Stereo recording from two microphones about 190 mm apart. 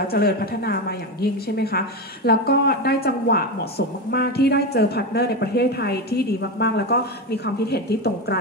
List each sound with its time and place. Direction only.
0.1 s a woman's voice: 55° left (ahead or behind)